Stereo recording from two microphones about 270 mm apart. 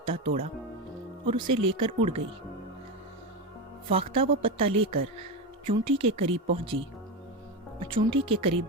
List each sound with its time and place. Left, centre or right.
0.0 s speech: right
3.8 s speech: right
7.9 s speech: centre